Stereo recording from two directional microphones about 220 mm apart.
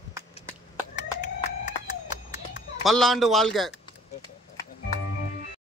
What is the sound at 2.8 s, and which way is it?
Speech, centre (ahead or behind).